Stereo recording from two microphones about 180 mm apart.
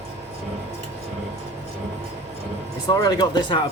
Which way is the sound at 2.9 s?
20° left (ahead or behind).